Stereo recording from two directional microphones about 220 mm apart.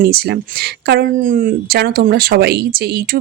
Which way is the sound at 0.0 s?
45° right (ahead or behind).